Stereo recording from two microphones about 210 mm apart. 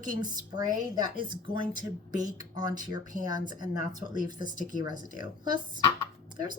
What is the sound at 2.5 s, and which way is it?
A woman's voice, 20° right (ahead or behind).